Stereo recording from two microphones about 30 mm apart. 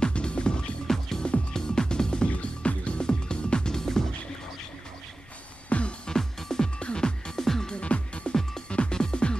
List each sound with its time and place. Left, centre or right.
0.0 s music: left
0.8 s music: centre
2.2 s music: left
3.1 s music: left
3.7 s music: centre
5.7 s music: left
6.0 s music: left
6.8 s music: left
7.4 s music: centre
7.7 s music: left